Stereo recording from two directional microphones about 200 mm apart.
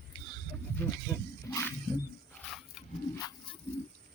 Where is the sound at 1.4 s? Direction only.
15° left (ahead or behind).